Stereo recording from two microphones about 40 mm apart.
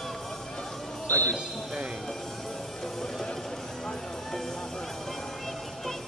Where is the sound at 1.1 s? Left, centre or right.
Left.